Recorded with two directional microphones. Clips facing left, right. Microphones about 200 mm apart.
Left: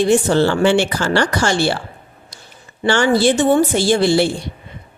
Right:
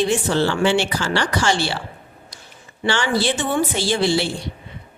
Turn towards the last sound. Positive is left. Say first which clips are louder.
# left 5 dB
turn(degrees=45)  # may be behind; listen again after turning